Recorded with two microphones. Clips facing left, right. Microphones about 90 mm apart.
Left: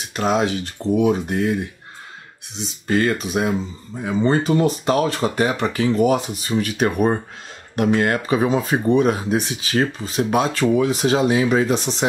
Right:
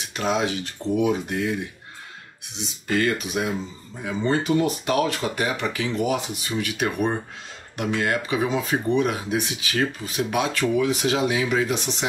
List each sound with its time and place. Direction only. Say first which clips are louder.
0.1 s speech: left 4 dB; 40° left (ahead or behind)
2.9 s speech: left 4 dB; 35° left (ahead or behind)